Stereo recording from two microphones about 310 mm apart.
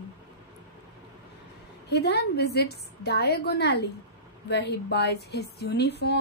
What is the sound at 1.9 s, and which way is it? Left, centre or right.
A woman's voice, left.